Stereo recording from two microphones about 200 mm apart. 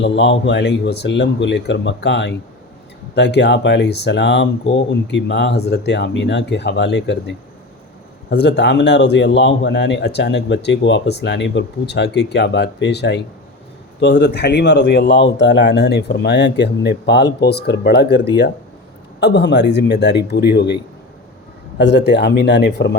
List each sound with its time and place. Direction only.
0.0 s a man's voice: 60° left (ahead or behind)
19.2 s a man's voice: 55° left (ahead or behind)
21.8 s a man's voice: 60° left (ahead or behind)